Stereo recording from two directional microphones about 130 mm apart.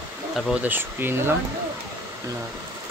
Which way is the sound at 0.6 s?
15° right (ahead or behind).